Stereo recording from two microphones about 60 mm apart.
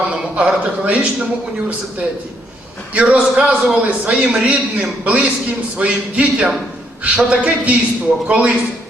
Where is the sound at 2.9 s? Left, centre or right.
Right.